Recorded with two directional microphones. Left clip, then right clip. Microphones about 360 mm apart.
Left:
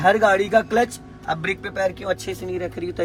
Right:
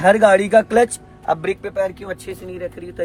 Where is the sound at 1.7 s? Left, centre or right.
Centre.